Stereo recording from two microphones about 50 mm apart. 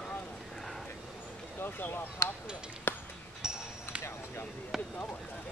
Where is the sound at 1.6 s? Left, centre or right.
Left.